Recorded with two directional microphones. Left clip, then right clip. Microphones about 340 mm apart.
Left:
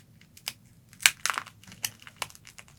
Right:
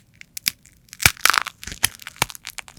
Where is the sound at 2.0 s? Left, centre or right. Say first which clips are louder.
Right 13 dB; right.